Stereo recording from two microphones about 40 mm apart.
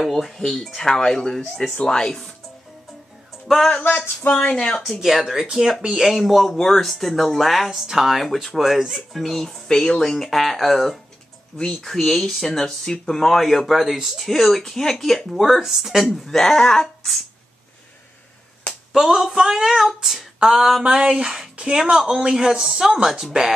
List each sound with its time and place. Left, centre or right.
0.0 s speech: centre
1.4 s speech: centre
1.8 s speech: centre
3.8 s a sound: left
4.7 s speech: centre
5.0 s speech: centre
9.7 s speech: centre
10.0 s speech: centre
11.5 s speech: centre
11.9 s speech: centre
16.3 s speech: centre
18.9 s a man's voice: centre